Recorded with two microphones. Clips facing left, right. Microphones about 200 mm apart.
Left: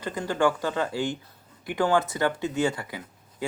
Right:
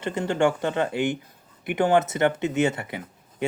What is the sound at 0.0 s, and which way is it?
Speech, 25° right (ahead or behind).